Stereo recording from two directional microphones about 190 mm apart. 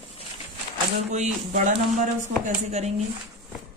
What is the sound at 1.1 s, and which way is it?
Speech, 40° right (ahead or behind).